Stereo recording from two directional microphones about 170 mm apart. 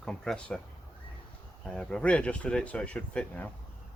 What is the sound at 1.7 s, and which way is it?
Speech, 5° left (ahead or behind).